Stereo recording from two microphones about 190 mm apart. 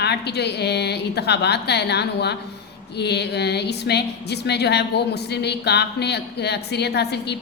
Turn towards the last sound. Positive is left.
turn(degrees=60)  # may be behind; listen again after turning